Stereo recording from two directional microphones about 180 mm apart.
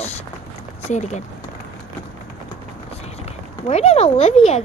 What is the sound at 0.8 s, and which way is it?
Speech, 40° left (ahead or behind).